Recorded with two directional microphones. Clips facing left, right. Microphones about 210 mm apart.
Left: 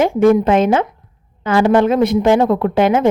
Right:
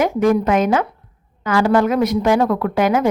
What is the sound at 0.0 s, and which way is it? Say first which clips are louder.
A woman's voice: left 4 dB; 25° left (ahead or behind).